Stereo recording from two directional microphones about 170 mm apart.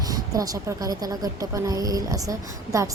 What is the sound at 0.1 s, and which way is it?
A woman's voice, 20° right (ahead or behind).